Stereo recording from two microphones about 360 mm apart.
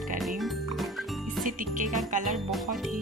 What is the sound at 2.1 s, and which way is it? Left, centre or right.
Speech, right.